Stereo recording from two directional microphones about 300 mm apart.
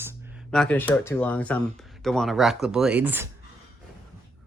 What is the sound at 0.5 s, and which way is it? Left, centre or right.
Speech, centre.